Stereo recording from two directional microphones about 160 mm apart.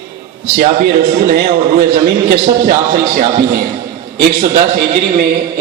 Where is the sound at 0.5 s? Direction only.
80° right.